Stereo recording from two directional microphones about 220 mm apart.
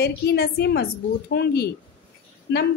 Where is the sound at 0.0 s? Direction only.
45° left (ahead or behind).